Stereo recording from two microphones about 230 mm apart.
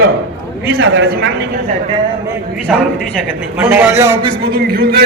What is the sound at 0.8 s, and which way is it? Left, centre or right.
Speech, right.